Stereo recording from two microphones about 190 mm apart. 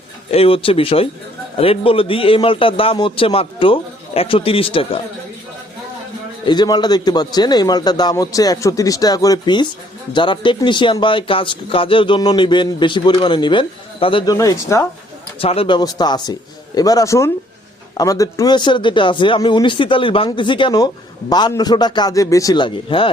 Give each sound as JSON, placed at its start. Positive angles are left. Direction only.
{"t": 0.3, "sound": "a man's voice", "side_deg": 30}
{"t": 6.4, "sound": "a man's voice", "side_deg": 20}
{"t": 15.4, "sound": "a man's voice", "side_deg": 30}